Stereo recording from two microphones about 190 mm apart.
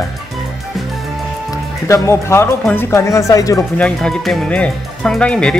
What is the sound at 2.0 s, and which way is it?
Speech, 15° left (ahead or behind).